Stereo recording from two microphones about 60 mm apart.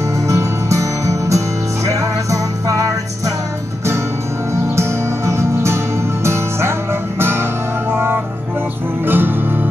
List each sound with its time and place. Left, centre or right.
0.3 s music: right
4.7 s music: right